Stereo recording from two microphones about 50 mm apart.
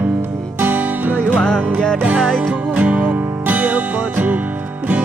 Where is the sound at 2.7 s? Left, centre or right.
Right.